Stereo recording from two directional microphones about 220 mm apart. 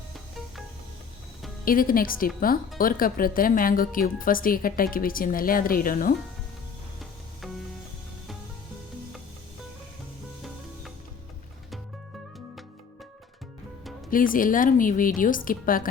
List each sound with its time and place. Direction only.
1.6 s speech: 40° left (ahead or behind)
14.1 s speech: 40° left (ahead or behind)